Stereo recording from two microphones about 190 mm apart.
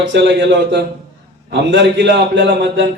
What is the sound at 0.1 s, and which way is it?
A man's voice, 65° right (ahead or behind).